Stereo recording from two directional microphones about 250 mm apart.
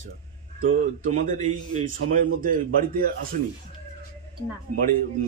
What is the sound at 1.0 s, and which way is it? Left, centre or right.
A man's voice, right.